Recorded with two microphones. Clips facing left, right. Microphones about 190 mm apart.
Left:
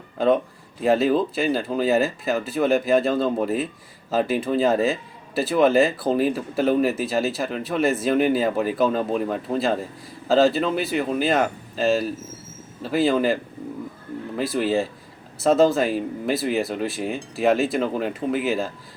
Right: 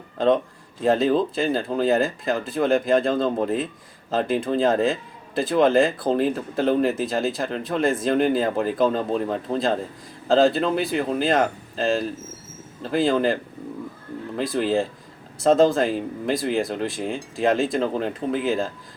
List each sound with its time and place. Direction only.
0.8 s speech: 5° left (ahead or behind)